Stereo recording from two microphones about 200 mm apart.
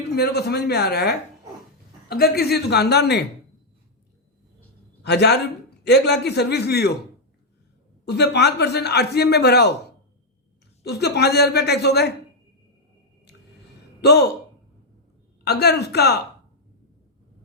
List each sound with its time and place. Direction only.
0.2 s speech: 55° left (ahead or behind)
5.0 s speech: 55° left (ahead or behind)
8.0 s speech: 55° left (ahead or behind)
10.8 s speech: 55° left (ahead or behind)
14.0 s speech: 55° left (ahead or behind)
15.4 s speech: 55° left (ahead or behind)